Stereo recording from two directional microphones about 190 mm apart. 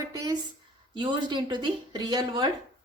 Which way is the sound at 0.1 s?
20° right (ahead or behind).